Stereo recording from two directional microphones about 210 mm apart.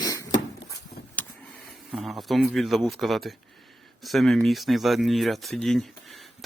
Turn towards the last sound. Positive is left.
turn(degrees=0)  # may be behind; listen again after turning